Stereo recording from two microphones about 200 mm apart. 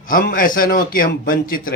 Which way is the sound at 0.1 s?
45° left (ahead or behind).